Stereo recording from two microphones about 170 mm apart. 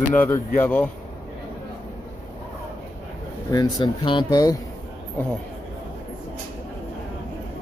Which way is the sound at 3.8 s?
30° left (ahead or behind).